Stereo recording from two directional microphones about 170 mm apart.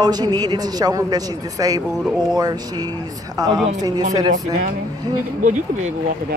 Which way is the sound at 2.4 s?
25° right (ahead or behind).